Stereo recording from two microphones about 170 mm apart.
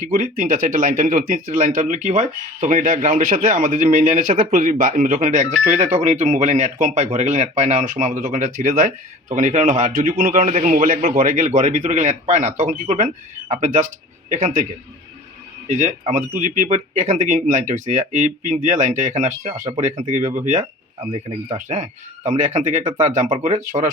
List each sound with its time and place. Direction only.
0.0 s speech: 50° right (ahead or behind)
21.0 s speech: 30° right (ahead or behind)
21.7 s speech: 45° right (ahead or behind)